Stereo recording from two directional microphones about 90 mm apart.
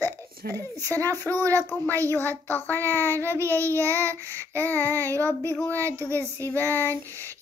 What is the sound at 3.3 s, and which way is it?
Child singing, 30° right (ahead or behind).